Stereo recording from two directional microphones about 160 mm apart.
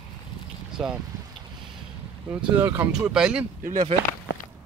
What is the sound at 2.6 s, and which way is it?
Speech, 20° right (ahead or behind).